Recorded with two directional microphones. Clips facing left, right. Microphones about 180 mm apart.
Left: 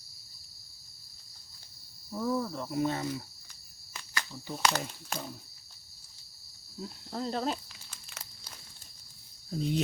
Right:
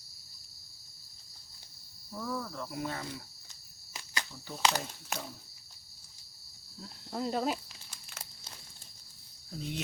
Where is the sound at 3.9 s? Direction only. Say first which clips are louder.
Left 1 dB; 20° right (ahead or behind).